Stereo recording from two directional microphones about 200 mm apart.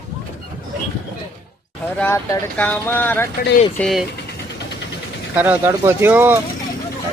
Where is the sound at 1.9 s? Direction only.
10° left (ahead or behind).